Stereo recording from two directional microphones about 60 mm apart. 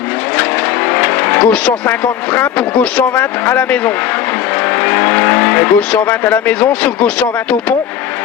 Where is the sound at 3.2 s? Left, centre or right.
Left.